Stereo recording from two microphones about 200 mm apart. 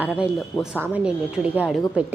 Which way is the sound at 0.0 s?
5° right (ahead or behind).